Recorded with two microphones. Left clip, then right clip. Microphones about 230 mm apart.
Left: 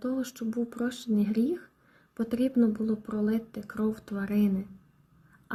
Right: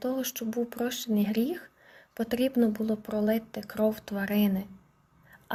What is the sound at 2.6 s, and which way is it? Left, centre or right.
Speech, right.